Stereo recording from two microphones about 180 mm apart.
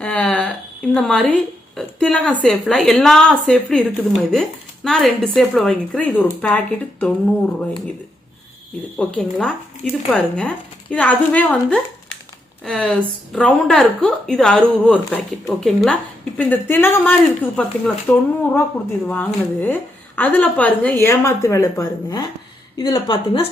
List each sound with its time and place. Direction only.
0.0 s a woman's voice: 5° left (ahead or behind)
9.0 s a woman's voice: 5° left (ahead or behind); by 23.5 s 25° left (ahead or behind)